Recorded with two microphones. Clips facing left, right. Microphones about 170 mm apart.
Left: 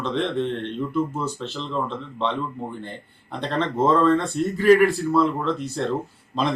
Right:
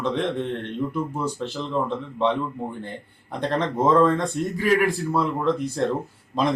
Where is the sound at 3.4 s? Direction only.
15° right (ahead or behind).